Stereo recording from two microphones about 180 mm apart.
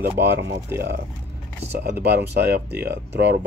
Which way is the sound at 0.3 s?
85° right.